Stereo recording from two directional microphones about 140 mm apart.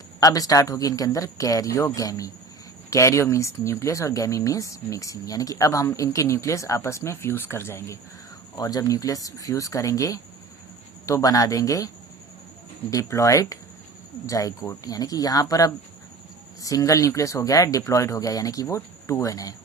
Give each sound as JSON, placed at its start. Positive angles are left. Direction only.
{"t": 0.2, "sound": "speech", "side_deg": 25}
{"t": 12.9, "sound": "speech", "side_deg": 20}